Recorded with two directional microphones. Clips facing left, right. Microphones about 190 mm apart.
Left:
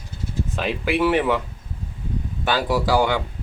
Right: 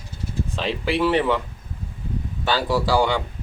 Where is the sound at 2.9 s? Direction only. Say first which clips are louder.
Left 1 dB; 5° left (ahead or behind).